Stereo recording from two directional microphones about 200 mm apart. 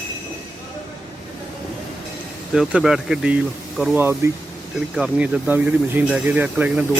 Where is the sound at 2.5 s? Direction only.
Centre (ahead or behind).